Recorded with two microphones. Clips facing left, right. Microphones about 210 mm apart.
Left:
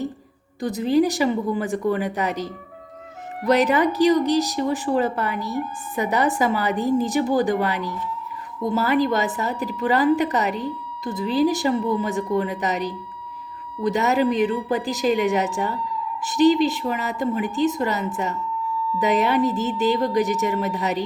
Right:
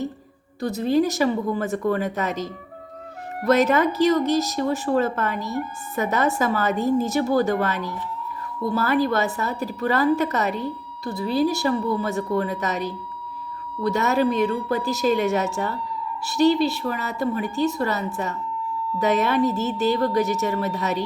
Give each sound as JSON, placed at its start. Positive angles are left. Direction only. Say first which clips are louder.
{"t": 0.6, "sound": "speech", "louder": "left 1 dB", "side_deg": 15}